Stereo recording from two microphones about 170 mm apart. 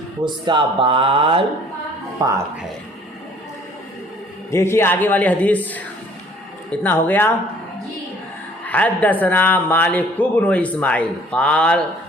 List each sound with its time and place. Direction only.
0.4 s a sound: 30° right (ahead or behind)
2.2 s speech: 20° right (ahead or behind)
4.5 s a man's voice: 15° left (ahead or behind)
8.6 s a man's voice: 10° left (ahead or behind)